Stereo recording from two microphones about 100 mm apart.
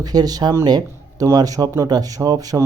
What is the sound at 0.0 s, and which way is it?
Speech, 40° right (ahead or behind).